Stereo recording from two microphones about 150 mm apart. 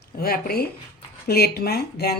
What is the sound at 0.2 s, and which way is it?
Speech, 90° left.